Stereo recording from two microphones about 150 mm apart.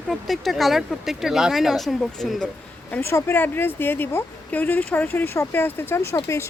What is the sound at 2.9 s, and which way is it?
A woman's voice, 15° left (ahead or behind).